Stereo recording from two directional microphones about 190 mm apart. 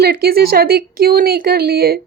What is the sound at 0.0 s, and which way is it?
A woman's voice, 55° right (ahead or behind).